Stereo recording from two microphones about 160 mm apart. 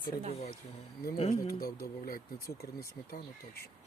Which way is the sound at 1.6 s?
70° left (ahead or behind).